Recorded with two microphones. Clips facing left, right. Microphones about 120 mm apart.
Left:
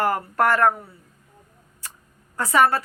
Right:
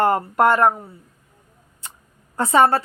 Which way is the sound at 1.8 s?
20° right (ahead or behind).